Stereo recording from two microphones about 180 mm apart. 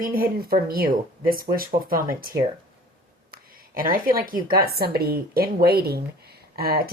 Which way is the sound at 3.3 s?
55° right (ahead or behind).